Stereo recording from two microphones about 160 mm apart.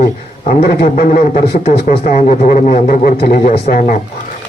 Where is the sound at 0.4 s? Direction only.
70° left (ahead or behind).